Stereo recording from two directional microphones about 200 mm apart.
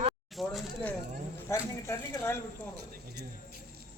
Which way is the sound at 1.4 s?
15° left (ahead or behind).